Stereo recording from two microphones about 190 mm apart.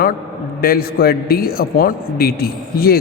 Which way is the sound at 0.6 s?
55° left (ahead or behind).